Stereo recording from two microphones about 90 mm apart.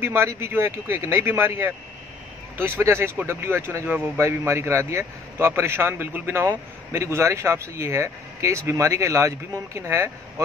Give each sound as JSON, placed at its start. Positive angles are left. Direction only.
{"t": 0.0, "sound": "a man's voice", "side_deg": -30}